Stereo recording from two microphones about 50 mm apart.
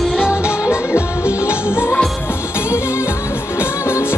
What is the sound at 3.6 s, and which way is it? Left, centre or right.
Music, left.